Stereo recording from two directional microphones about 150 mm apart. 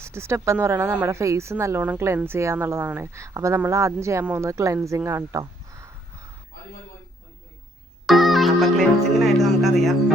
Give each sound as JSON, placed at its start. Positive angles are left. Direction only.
{"t": 0.0, "sound": "a woman's voice", "side_deg": -20}
{"t": 8.0, "sound": "music", "side_deg": 0}
{"t": 9.1, "sound": "speech", "side_deg": 0}